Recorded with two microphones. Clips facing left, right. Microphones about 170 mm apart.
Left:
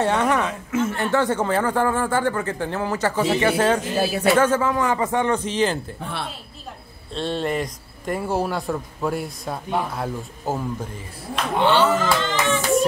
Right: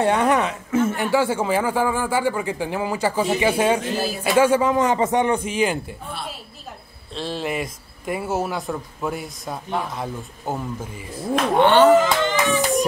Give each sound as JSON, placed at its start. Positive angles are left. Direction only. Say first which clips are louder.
{"t": 0.0, "sound": "a man's voice", "louder": "right 2 dB", "side_deg": -15}
{"t": 0.7, "sound": "chuckle", "louder": "right 4 dB", "side_deg": -30}
{"t": 0.9, "sound": "a man's voice", "louder": "right 1 dB", "side_deg": -10}
{"t": 7.2, "sound": "speech", "louder": "left 2 dB", "side_deg": 0}
{"t": 11.5, "sound": "speech", "louder": "right 4 dB", "side_deg": -55}
{"t": 12.0, "sound": "a child's voice", "louder": "right 2 dB", "side_deg": -15}